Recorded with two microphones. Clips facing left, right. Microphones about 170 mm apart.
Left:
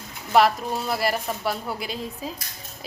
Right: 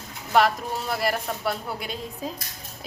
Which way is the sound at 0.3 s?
Centre (ahead or behind).